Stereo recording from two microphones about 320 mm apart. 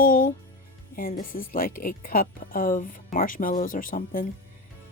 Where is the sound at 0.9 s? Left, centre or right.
Left.